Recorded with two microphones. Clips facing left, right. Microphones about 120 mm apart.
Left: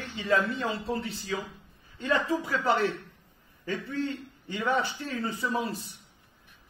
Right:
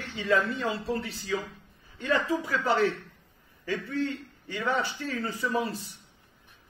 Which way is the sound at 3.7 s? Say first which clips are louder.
Right 1 dB; 20° left (ahead or behind).